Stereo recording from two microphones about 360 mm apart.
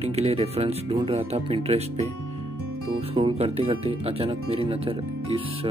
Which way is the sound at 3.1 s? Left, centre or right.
Centre.